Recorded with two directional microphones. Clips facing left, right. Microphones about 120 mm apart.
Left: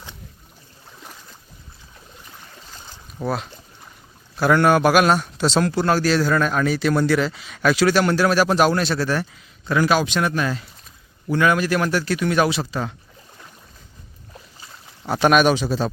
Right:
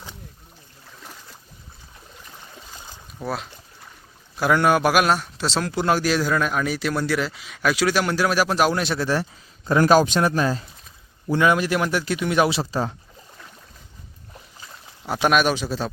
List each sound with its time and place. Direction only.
3.2 s a man's voice: centre (ahead or behind)
5.7 s a man's voice: 15° right (ahead or behind)
9.6 s a man's voice: 40° right (ahead or behind); by 12.5 s 15° right (ahead or behind)
12.5 s speech: 30° right (ahead or behind)
15.0 s a man's voice: centre (ahead or behind)